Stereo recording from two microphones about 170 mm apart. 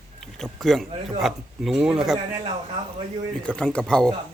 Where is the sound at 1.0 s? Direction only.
Centre (ahead or behind).